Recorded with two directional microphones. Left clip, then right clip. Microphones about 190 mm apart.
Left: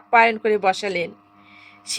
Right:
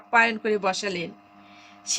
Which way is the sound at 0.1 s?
15° left (ahead or behind).